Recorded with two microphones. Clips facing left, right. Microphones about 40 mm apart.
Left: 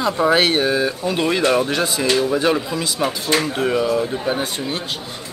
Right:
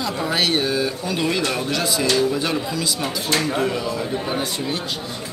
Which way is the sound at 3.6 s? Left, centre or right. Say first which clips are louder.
Left 4 dB; left.